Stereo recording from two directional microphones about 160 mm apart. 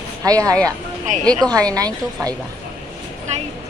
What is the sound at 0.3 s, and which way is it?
Speech, 20° right (ahead or behind).